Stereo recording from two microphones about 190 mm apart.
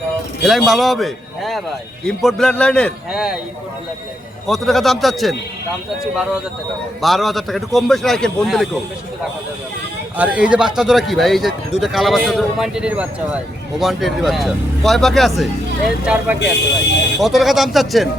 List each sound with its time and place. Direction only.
0.4 s a man's voice: centre (ahead or behind)
4.4 s a man's voice: centre (ahead or behind)
7.0 s a man's voice: centre (ahead or behind)
10.2 s a man's voice: 5° right (ahead or behind)
16.4 s speech: 65° left (ahead or behind)
17.2 s a man's voice: centre (ahead or behind)